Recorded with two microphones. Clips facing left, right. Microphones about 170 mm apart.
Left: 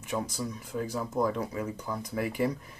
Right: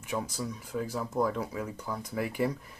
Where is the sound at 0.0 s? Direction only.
5° right (ahead or behind).